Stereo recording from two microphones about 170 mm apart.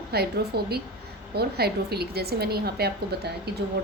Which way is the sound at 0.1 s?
70° right (ahead or behind).